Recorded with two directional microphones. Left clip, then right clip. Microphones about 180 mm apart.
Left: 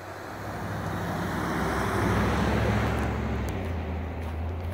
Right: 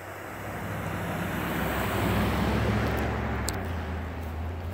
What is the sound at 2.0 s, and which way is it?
Vehicle, 55° right (ahead or behind).